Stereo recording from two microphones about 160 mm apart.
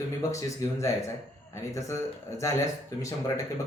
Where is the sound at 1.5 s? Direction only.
20° left (ahead or behind).